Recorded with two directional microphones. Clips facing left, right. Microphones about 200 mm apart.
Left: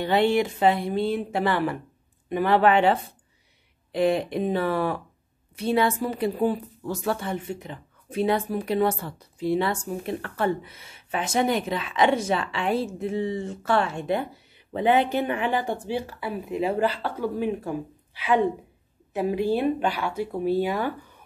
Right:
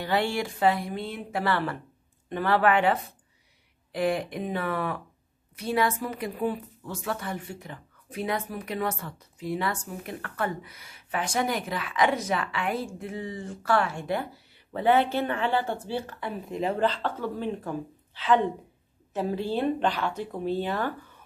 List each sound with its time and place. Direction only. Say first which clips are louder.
0.0 s speech: left 6 dB; 20° left (ahead or behind)
1.4 s speech: right 1 dB; 15° left (ahead or behind)